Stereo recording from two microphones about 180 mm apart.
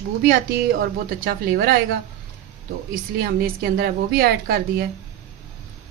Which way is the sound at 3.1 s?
60° right (ahead or behind).